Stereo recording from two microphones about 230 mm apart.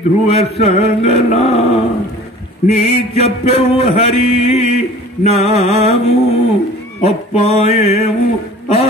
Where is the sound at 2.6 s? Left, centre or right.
Left.